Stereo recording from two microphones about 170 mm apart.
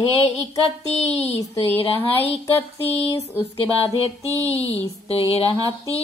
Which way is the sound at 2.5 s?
35° left (ahead or behind).